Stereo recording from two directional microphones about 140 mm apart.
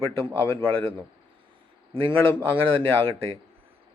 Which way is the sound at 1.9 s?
40° right (ahead or behind).